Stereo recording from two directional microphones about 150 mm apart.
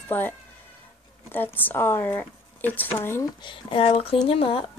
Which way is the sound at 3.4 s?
35° left (ahead or behind).